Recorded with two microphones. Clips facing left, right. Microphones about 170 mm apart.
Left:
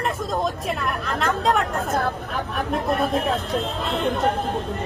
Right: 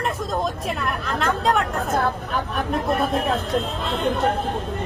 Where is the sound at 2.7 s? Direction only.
Centre (ahead or behind).